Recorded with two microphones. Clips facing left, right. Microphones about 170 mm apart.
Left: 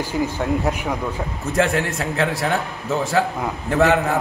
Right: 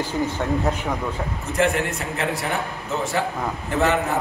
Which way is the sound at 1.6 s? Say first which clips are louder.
Left 1 dB; 90° left.